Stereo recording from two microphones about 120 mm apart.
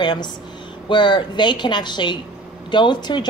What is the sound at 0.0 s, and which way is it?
A woman's voice, 40° left (ahead or behind).